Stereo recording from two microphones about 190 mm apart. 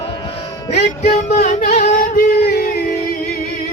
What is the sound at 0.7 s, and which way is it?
Music, 35° left (ahead or behind).